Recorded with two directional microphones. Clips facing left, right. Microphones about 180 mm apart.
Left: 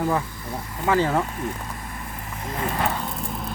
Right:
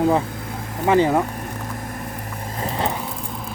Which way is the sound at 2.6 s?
20° right (ahead or behind).